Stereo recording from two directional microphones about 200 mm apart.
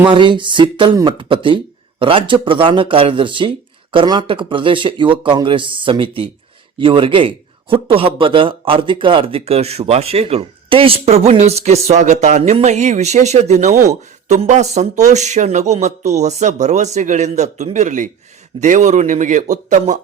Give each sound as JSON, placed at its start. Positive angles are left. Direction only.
{"t": 0.1, "sound": "a man's voice", "side_deg": -25}